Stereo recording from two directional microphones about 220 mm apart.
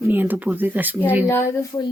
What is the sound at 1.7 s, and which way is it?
Speech, 20° left (ahead or behind).